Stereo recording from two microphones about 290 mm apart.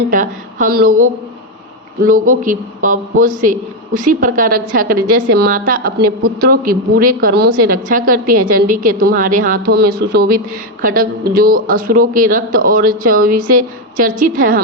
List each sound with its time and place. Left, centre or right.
0.1 s speech: right
2.0 s speech: right